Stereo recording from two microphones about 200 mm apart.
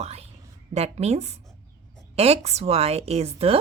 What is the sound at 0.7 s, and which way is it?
A woman's voice, 30° right (ahead or behind).